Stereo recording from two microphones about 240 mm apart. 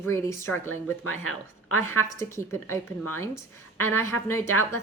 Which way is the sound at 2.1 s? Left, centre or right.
Centre.